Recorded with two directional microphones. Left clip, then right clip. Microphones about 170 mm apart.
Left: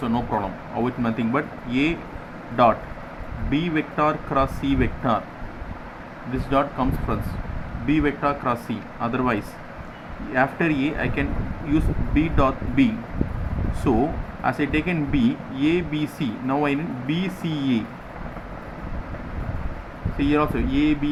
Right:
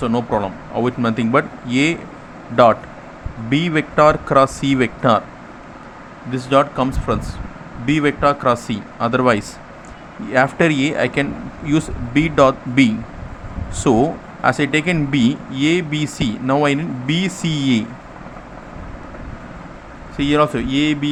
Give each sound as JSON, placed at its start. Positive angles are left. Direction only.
{"t": 0.0, "sound": "speech", "side_deg": -40}
{"t": 3.5, "sound": "speech", "side_deg": -55}
{"t": 6.3, "sound": "speech", "side_deg": -50}
{"t": 20.1, "sound": "speech", "side_deg": -50}